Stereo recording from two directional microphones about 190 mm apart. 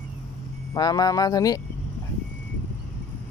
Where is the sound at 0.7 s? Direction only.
20° left (ahead or behind).